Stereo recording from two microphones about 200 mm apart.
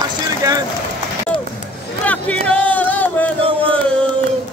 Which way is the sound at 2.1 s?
5° left (ahead or behind).